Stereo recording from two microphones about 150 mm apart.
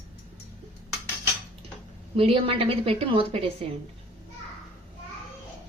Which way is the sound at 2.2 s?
40° right (ahead or behind).